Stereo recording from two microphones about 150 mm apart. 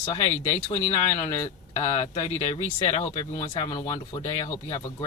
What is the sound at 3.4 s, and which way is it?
Speech, 30° left (ahead or behind).